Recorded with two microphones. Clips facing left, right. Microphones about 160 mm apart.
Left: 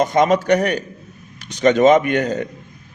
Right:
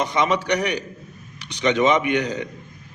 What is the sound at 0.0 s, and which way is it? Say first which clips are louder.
A man's voice: left 6 dB; 45° left (ahead or behind).